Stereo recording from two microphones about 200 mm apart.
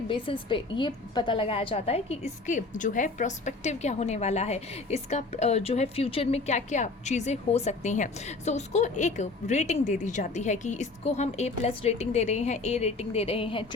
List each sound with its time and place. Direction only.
0.1 s a woman's voice: 25° left (ahead or behind)